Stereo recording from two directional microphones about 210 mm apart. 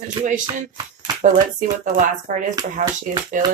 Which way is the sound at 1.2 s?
40° right (ahead or behind).